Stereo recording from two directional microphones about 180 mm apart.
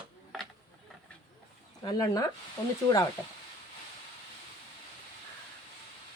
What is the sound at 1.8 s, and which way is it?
Speech, 20° left (ahead or behind).